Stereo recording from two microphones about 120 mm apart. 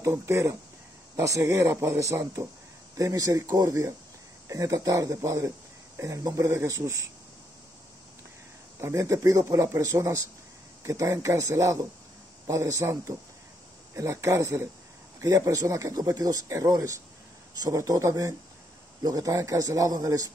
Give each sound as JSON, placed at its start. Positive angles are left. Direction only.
{"t": 0.0, "sound": "speech", "side_deg": -25}
{"t": 8.8, "sound": "speech", "side_deg": -25}